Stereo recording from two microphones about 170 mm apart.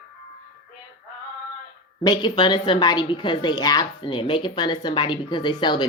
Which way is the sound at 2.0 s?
25° left (ahead or behind).